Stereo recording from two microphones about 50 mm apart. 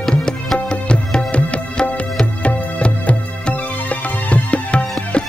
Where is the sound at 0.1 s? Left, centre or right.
Centre.